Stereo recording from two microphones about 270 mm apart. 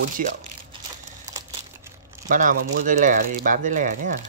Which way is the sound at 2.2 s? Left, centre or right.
Right.